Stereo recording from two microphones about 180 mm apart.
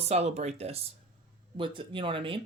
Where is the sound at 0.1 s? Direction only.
35° right (ahead or behind).